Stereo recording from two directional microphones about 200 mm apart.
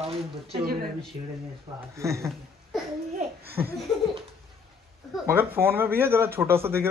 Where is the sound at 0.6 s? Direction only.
50° right (ahead or behind).